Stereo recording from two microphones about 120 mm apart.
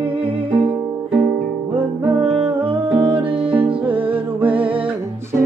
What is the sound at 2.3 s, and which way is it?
Music, 50° right (ahead or behind).